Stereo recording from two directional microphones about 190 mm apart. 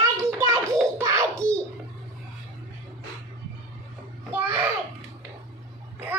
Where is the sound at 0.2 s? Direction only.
15° right (ahead or behind).